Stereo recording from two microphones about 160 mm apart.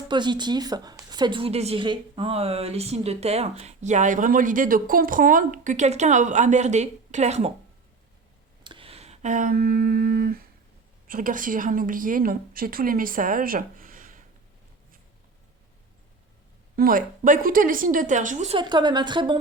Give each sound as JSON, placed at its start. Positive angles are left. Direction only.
{"t": 0.1, "sound": "a woman's voice", "side_deg": -30}
{"t": 8.6, "sound": "a sound", "side_deg": -35}
{"t": 11.1, "sound": "speech", "side_deg": -60}
{"t": 16.7, "sound": "speech", "side_deg": -65}
{"t": 18.5, "sound": "a woman's voice", "side_deg": -25}